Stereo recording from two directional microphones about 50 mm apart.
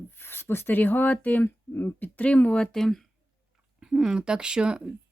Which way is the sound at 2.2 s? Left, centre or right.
Left.